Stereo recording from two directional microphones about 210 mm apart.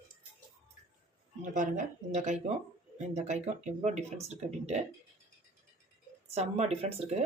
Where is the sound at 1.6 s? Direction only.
35° right (ahead or behind).